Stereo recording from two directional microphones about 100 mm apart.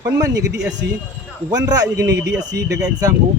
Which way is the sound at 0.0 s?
35° right (ahead or behind).